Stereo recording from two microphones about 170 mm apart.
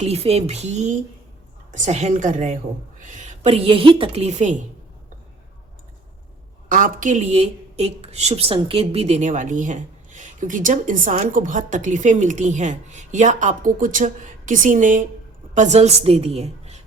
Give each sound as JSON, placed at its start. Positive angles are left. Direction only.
{"t": 0.0, "sound": "a woman's voice", "side_deg": -35}
{"t": 6.7, "sound": "a woman's voice", "side_deg": -55}